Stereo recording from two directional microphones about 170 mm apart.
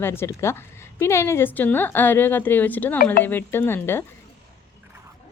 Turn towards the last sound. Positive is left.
turn(degrees=15)  # may be behind; listen again after turning